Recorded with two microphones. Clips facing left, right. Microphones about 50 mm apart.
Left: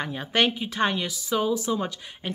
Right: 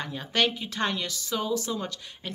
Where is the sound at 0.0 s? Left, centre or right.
Left.